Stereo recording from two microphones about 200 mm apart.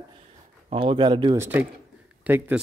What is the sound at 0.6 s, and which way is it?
Speech, 25° right (ahead or behind).